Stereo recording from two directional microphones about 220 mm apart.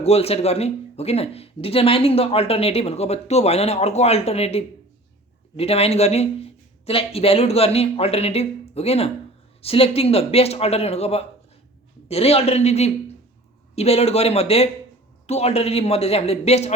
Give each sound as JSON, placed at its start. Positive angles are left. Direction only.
{"t": 0.0, "sound": "speech", "side_deg": 30}